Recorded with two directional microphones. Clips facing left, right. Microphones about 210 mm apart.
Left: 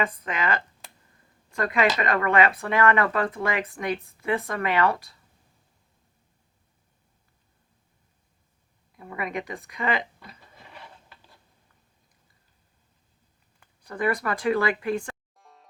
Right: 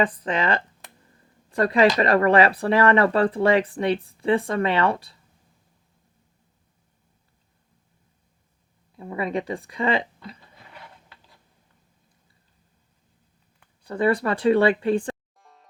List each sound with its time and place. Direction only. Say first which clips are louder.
0.0 s speech: right 5 dB; 30° right (ahead or behind)
9.0 s speech: right 5 dB; 30° right (ahead or behind)
13.8 s speech: right 5 dB; 30° right (ahead or behind)
15.4 s music: even; centre (ahead or behind)